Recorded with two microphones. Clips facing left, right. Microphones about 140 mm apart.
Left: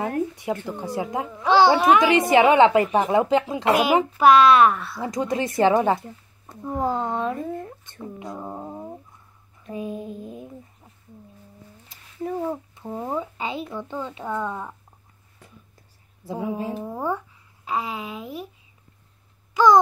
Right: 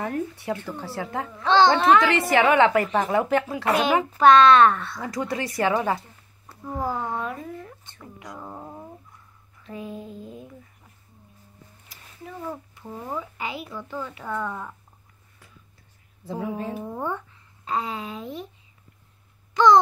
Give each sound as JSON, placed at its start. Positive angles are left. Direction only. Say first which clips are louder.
{"t": 0.0, "sound": "a child's voice", "louder": "left 3 dB", "side_deg": 15}
{"t": 5.0, "sound": "speech", "louder": "left 4 dB", "side_deg": 20}
{"t": 8.0, "sound": "a sound", "louder": "left 6 dB", "side_deg": 25}
{"t": 12.2, "sound": "a child's voice", "louder": "left 11 dB", "side_deg": 40}
{"t": 12.4, "sound": "speech", "louder": "left 5 dB", "side_deg": 20}
{"t": 16.3, "sound": "a child's voice", "louder": "left 2 dB", "side_deg": 15}
{"t": 19.5, "sound": "a sound", "louder": "even", "side_deg": 10}